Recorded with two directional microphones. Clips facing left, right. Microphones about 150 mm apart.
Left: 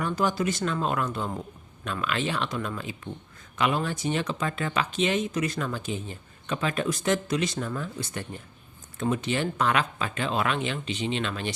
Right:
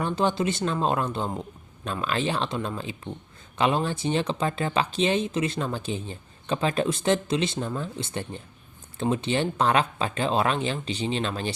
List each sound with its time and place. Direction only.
0.0 s speech: 25° right (ahead or behind)